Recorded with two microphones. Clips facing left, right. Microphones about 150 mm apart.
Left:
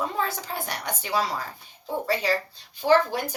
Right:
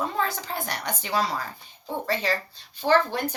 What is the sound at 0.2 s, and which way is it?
Speech, 10° left (ahead or behind).